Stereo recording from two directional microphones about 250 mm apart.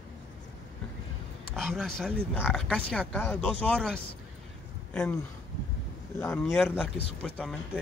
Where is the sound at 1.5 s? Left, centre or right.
Centre.